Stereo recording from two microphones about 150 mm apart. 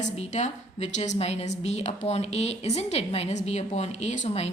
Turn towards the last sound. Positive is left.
turn(degrees=50)  # may be behind; listen again after turning